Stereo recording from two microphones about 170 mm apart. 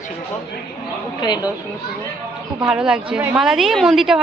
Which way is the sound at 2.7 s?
5° right (ahead or behind).